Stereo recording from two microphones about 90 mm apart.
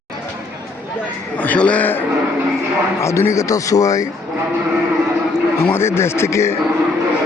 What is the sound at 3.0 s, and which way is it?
A man's voice, 30° left (ahead or behind).